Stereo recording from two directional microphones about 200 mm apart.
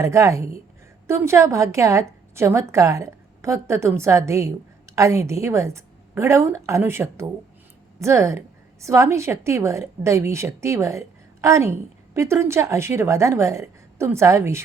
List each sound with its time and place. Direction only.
0.0 s a woman's voice: 15° right (ahead or behind)